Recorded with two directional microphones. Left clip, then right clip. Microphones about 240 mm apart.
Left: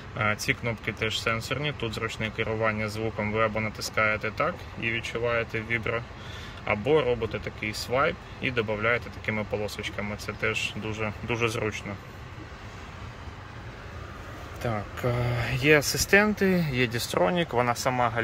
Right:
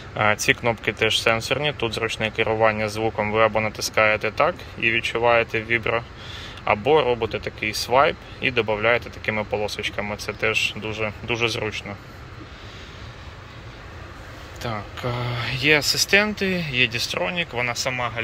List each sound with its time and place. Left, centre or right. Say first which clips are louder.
0.2 s speech: right 8 dB; centre
14.6 s speech: right 1 dB; centre